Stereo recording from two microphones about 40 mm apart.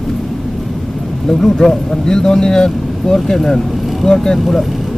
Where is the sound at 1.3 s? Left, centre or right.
Centre.